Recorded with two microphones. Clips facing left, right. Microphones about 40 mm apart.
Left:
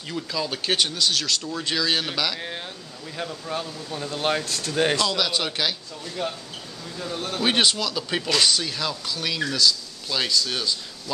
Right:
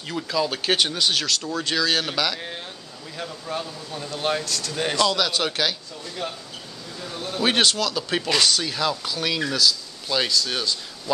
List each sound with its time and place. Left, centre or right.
0.1 s speech: centre
1.2 s speech: centre
4.5 s speech: left
5.1 s speech: centre
7.3 s speech: centre